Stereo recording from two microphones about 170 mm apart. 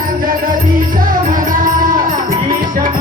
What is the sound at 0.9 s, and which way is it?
Music, 55° right (ahead or behind).